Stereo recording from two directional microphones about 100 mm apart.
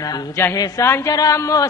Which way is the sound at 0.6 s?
25° left (ahead or behind).